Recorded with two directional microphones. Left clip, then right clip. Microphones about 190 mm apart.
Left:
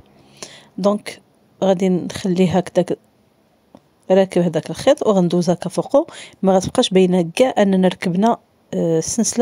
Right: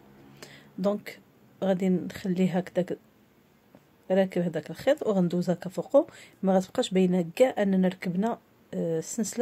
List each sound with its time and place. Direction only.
0.3 s speech: 40° left (ahead or behind)
4.1 s speech: 45° left (ahead or behind)